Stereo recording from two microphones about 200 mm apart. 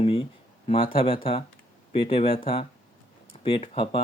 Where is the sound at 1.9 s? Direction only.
30° left (ahead or behind).